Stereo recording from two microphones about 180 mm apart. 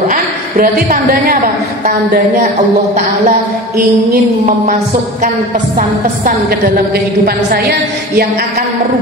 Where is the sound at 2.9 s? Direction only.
50° right (ahead or behind).